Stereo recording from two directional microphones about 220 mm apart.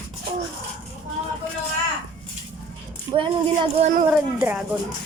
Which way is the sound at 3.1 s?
20° right (ahead or behind).